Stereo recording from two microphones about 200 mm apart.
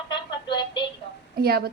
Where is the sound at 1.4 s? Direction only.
50° right (ahead or behind).